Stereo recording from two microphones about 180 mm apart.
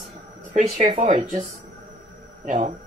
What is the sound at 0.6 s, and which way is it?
Speech, 40° right (ahead or behind).